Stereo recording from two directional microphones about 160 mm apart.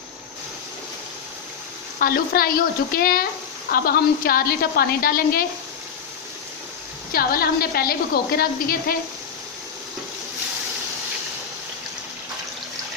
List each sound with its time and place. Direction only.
2.0 s a woman's voice: 65° left (ahead or behind)
7.1 s a woman's voice: 65° left (ahead or behind)